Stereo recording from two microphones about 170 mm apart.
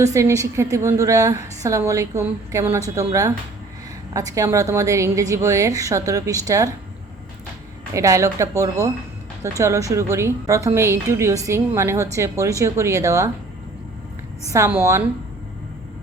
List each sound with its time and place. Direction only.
0.0 s a woman's voice: 15° right (ahead or behind)
7.9 s a woman's voice: 20° right (ahead or behind)
14.4 s a woman's voice: 15° right (ahead or behind)